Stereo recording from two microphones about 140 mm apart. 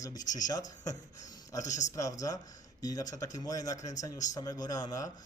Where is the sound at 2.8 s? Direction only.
25° left (ahead or behind).